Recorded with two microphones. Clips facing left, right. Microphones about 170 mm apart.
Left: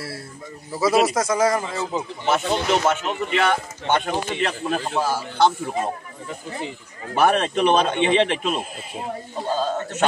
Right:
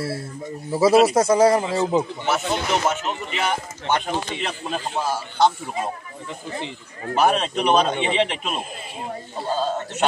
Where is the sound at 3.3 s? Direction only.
65° left (ahead or behind).